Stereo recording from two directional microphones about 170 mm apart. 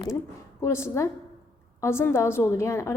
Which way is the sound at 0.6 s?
15° left (ahead or behind).